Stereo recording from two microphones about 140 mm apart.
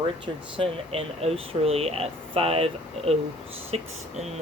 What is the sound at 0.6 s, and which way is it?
Speech, 45° right (ahead or behind).